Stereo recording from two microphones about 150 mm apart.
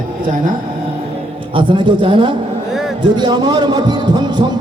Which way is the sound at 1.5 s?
30° right (ahead or behind).